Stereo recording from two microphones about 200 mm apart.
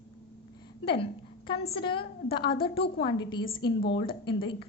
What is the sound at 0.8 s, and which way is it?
A woman's voice, 25° left (ahead or behind).